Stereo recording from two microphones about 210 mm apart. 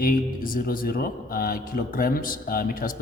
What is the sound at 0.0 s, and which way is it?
Speech, 45° left (ahead or behind).